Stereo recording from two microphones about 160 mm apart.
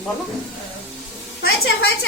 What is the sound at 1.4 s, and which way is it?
Speech, 85° left.